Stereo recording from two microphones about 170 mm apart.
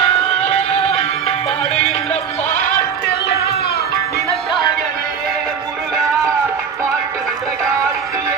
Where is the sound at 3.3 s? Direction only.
70° left (ahead or behind).